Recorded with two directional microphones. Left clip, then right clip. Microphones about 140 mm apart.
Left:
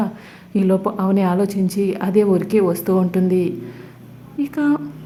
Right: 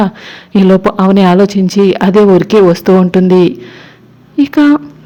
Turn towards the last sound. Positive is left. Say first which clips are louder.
# right 11 dB
turn(degrees=-45)  # may be behind; listen again after turning